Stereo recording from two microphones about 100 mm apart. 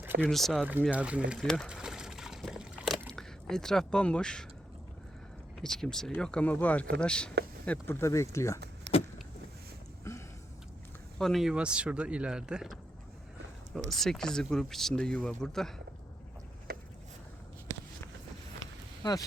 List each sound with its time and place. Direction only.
0.2 s speech: 5° left (ahead or behind)
0.9 s speech: 15° right (ahead or behind)
1.4 s speech: 5° left (ahead or behind)
1.7 s a sound: 5° right (ahead or behind)
3.1 s speech: 5° left (ahead or behind)
5.5 s speech: 5° left (ahead or behind); by 8.6 s 30° left (ahead or behind)
10.0 s a sound: 30° left (ahead or behind)
11.2 s speech: centre (ahead or behind)
11.5 s speech: 10° right (ahead or behind); by 15.7 s 5° left (ahead or behind)
18.6 s a sound: 35° left (ahead or behind)